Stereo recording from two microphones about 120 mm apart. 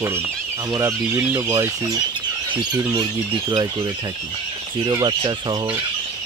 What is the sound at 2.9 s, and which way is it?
Speech, 35° right (ahead or behind).